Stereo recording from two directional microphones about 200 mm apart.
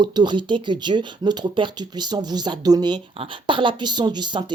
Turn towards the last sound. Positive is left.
turn(degrees=-20)  # may be behind; listen again after turning